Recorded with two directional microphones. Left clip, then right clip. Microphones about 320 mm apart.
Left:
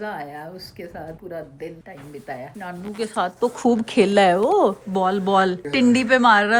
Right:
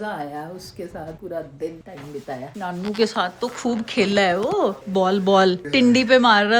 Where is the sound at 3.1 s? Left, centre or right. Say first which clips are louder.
Left 2 dB; centre.